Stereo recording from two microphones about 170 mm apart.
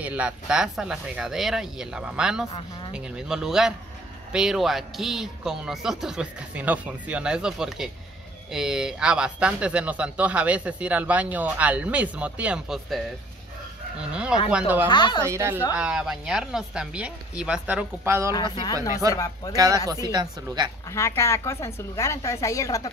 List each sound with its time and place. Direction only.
0.0 s speech: 10° right (ahead or behind)
14.5 s speech: 10° right (ahead or behind)
14.9 s speech: 25° left (ahead or behind)
15.2 s speech: 15° right (ahead or behind)
18.0 s speech: 15° right (ahead or behind)
18.3 s speech: 25° left (ahead or behind)
19.5 s a woman's voice: 20° right (ahead or behind)
20.9 s a woman's voice: 15° left (ahead or behind)